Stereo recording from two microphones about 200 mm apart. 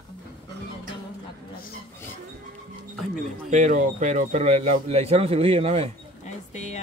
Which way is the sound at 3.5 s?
40° right (ahead or behind).